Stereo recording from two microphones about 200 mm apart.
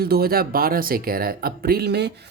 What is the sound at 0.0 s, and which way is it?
Speech, 50° right (ahead or behind).